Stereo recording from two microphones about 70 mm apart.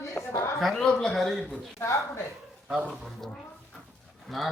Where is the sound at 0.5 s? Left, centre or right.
Centre.